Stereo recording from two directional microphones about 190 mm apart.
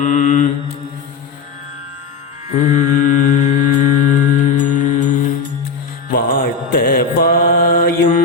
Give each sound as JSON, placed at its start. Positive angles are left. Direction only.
{"t": 0.0, "sound": "mantra", "side_deg": 40}
{"t": 2.5, "sound": "mantra", "side_deg": 40}
{"t": 6.1, "sound": "mantra", "side_deg": 50}